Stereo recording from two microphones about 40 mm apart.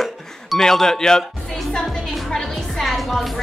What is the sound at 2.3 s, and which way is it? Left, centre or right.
A woman's voice, centre.